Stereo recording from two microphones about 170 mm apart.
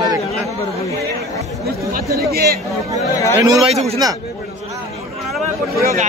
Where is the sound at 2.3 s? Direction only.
65° right (ahead or behind).